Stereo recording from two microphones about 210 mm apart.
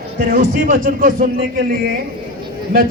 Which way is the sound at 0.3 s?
40° right (ahead or behind).